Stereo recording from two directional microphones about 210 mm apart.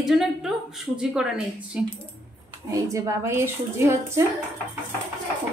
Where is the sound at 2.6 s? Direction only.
15° right (ahead or behind).